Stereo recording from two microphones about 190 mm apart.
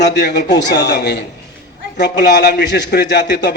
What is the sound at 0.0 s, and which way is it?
A man's voice, 65° left (ahead or behind).